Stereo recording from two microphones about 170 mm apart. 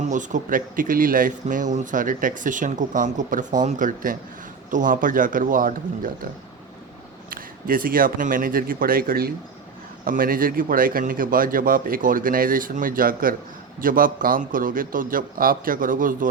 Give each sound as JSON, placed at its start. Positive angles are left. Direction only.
{"t": 0.1, "sound": "speech", "side_deg": -50}
{"t": 7.3, "sound": "a man's voice", "side_deg": -55}